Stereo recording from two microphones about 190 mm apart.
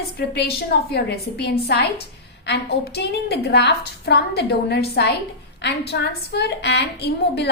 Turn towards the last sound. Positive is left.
turn(degrees=60)  # may be behind; listen again after turning